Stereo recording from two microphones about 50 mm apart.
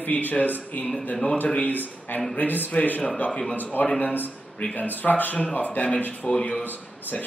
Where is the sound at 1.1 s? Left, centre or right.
Centre.